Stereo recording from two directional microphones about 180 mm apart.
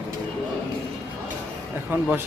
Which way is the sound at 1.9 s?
10° right (ahead or behind).